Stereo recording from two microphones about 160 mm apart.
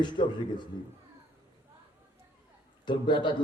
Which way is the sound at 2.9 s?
30° left (ahead or behind).